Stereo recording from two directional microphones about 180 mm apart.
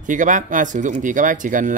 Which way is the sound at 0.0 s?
45° right (ahead or behind).